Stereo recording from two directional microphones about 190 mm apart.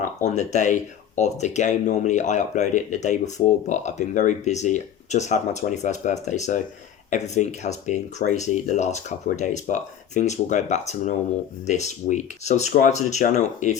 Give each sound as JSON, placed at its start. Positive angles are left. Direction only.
{"t": 0.0, "sound": "speech", "side_deg": 40}